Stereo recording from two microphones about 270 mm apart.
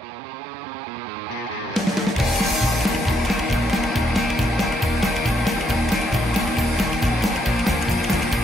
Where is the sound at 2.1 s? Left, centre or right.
Centre.